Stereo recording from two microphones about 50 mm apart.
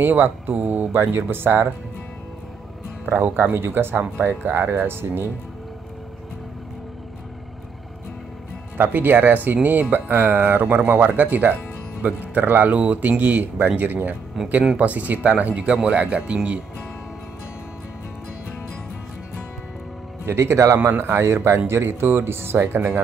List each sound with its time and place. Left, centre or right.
0.0 s speech: right
3.2 s speech: right
8.7 s speech: right
10.1 s speech: right
14.4 s speech: centre
14.8 s speech: right
20.2 s speech: right
20.7 s speech: right